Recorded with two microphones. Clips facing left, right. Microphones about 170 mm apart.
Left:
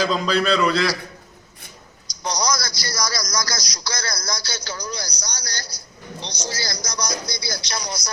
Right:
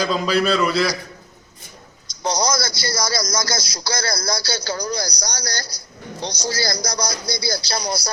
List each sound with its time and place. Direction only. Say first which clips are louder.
0.0 s a man's voice: right 1 dB; 5° right (ahead or behind)
2.2 s speech: right 3 dB; 25° right (ahead or behind)